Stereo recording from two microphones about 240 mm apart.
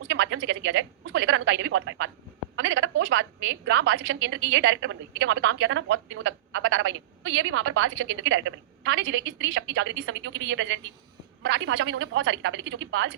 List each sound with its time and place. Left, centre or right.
0.1 s a woman's voice: right